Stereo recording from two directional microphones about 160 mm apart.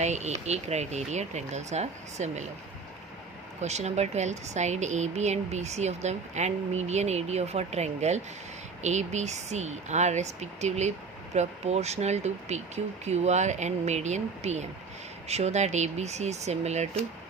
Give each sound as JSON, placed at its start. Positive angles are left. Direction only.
{"t": 0.0, "sound": "speech", "side_deg": -45}
{"t": 3.6, "sound": "speech", "side_deg": -45}